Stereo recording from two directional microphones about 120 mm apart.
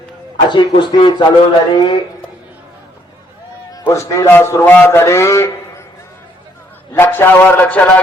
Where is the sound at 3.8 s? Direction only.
25° left (ahead or behind).